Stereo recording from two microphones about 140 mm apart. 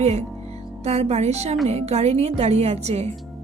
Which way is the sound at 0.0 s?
50° right (ahead or behind).